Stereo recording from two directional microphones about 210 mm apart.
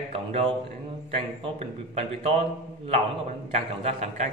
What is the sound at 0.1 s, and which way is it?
A man's voice, 30° right (ahead or behind).